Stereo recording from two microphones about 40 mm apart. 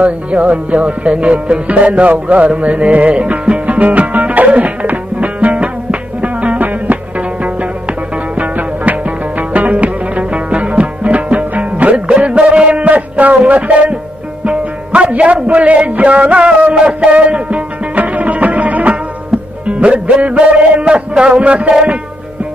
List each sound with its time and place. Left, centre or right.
0.0 s music: right
19.6 s a man's voice: right